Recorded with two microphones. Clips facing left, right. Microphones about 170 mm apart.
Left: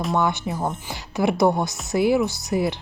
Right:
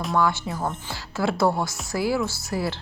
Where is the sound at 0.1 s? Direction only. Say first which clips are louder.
Right 1 dB; 20° left (ahead or behind).